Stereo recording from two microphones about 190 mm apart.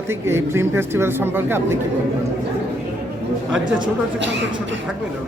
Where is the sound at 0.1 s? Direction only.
15° right (ahead or behind).